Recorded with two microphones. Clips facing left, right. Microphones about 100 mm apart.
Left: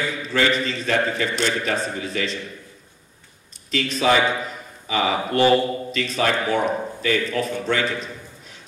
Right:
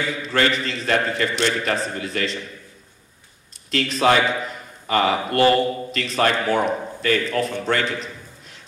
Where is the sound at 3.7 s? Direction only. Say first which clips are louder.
Right 1 dB; 50° right (ahead or behind).